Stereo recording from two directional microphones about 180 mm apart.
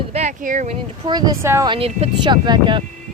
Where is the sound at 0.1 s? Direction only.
40° right (ahead or behind).